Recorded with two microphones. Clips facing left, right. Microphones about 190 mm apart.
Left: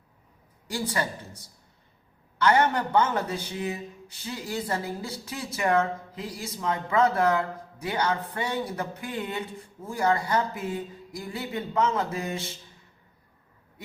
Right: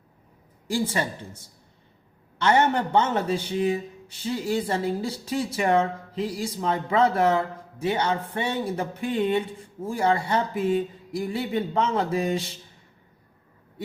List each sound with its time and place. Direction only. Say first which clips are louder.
0.7 s speech: right 4 dB; 25° right (ahead or behind)
2.4 s speech: right 1 dB; 25° right (ahead or behind)